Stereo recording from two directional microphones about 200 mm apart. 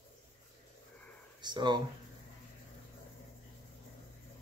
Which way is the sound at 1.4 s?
20° right (ahead or behind).